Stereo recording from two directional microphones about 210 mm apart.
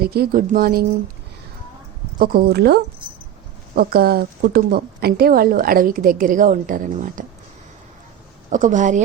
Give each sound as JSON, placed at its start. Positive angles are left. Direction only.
{"t": 0.0, "sound": "a woman's voice", "side_deg": -50}
{"t": 2.1, "sound": "a woman's voice", "side_deg": -45}
{"t": 8.4, "sound": "a woman's voice", "side_deg": -35}